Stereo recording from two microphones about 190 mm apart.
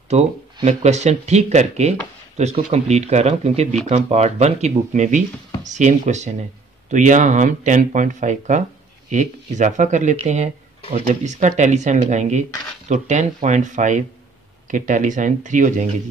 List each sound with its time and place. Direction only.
0.1 s speech: 35° right (ahead or behind)